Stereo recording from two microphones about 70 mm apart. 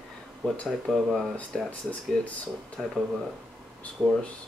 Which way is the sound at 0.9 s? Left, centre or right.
Centre.